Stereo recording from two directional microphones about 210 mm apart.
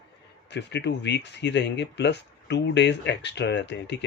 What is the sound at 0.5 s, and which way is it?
Speech, 55° left (ahead or behind).